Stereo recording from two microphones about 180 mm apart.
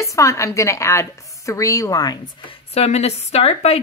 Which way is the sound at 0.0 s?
15° left (ahead or behind).